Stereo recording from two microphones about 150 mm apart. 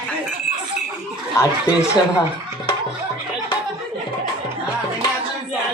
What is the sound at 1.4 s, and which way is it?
Speech, 20° left (ahead or behind).